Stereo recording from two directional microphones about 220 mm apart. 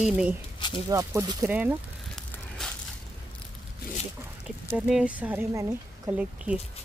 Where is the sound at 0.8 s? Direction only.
15° right (ahead or behind).